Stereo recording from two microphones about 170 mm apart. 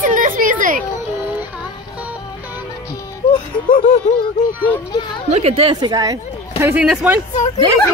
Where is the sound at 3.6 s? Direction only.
55° left (ahead or behind).